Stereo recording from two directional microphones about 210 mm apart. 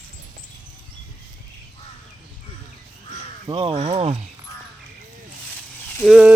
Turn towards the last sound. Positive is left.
turn(degrees=-5)  # may be behind; listen again after turning